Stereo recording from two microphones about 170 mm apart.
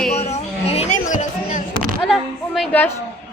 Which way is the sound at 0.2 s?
40° left (ahead or behind).